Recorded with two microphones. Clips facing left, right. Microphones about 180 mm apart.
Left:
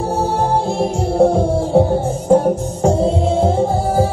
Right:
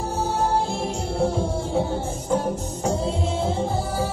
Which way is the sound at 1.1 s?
55° left (ahead or behind).